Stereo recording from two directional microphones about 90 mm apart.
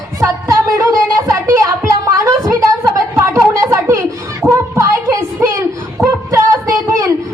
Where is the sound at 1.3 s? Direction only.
35° right (ahead or behind).